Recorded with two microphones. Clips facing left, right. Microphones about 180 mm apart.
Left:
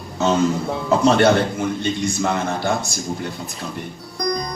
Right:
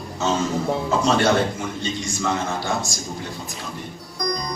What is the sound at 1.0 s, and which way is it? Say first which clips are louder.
A man's voice: left 4 dB; 60° left (ahead or behind).